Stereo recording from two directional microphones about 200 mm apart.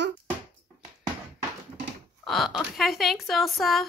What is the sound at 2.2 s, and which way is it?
Speech, centre (ahead or behind).